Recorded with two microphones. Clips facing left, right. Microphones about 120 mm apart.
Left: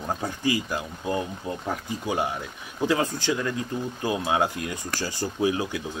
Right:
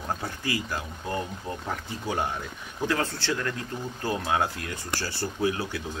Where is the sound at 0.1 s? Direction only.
15° left (ahead or behind).